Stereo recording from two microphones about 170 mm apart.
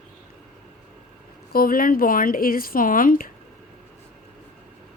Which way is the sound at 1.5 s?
60° left (ahead or behind).